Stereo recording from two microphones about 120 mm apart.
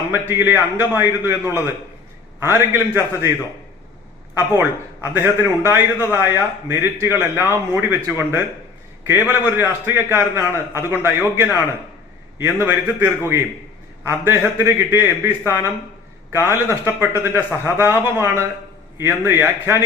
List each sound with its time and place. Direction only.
0.1 s a man's voice: 20° right (ahead or behind)
4.4 s a man's voice: 20° right (ahead or behind)